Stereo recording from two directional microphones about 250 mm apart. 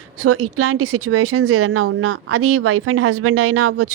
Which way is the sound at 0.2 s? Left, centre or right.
Right.